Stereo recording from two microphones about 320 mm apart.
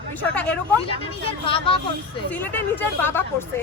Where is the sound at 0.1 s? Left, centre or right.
Centre.